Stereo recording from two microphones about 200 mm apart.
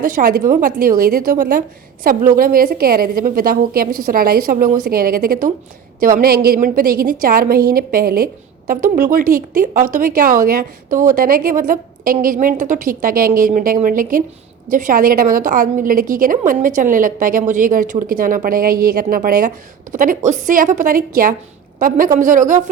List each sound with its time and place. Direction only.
0.0 s a woman's voice: 45° right (ahead or behind)